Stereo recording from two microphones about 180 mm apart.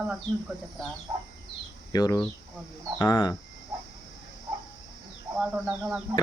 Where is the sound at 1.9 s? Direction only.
20° left (ahead or behind).